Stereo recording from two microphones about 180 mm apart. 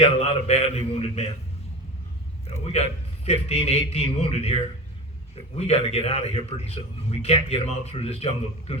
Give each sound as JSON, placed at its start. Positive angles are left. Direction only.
{"t": 0.0, "sound": "a man's voice", "side_deg": 35}
{"t": 2.5, "sound": "a man's voice", "side_deg": 35}